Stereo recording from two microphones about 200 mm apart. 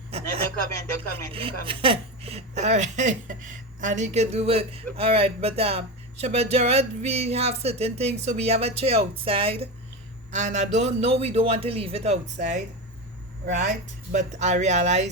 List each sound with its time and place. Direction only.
0.1 s speech: 30° right (ahead or behind)
1.3 s a woman's voice: 25° right (ahead or behind)